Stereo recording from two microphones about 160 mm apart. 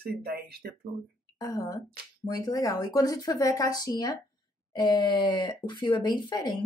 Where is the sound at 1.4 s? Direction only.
20° left (ahead or behind).